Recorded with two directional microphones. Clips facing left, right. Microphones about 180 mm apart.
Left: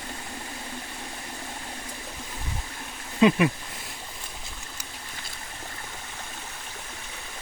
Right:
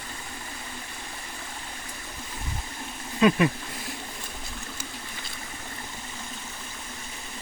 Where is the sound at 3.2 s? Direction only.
20° left (ahead or behind).